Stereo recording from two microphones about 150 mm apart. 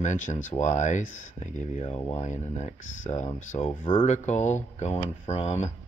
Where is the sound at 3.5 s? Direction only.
40° left (ahead or behind).